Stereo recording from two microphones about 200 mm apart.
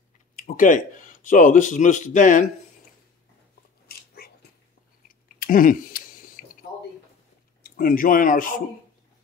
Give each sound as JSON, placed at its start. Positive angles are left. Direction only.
{"t": 0.4, "sound": "speech", "side_deg": 40}
{"t": 3.8, "sound": "dog", "side_deg": 50}
{"t": 5.4, "sound": "a sound", "side_deg": 45}
{"t": 7.6, "sound": "speech", "side_deg": 45}